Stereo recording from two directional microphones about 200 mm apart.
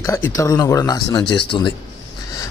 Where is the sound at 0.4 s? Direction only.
15° left (ahead or behind).